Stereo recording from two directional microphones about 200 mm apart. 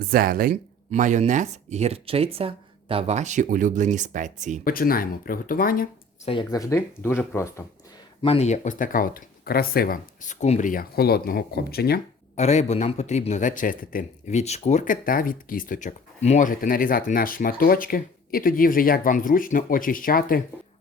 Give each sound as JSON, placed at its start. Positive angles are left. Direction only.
{"t": 0.1, "sound": "speech", "side_deg": -50}
{"t": 4.6, "sound": "a man's voice", "side_deg": 45}
{"t": 6.2, "sound": "speech", "side_deg": 20}
{"t": 8.2, "sound": "a man's voice", "side_deg": 30}
{"t": 12.4, "sound": "a man's voice", "side_deg": 35}